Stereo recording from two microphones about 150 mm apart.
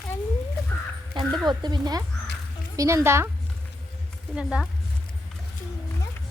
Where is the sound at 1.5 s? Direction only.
30° right (ahead or behind).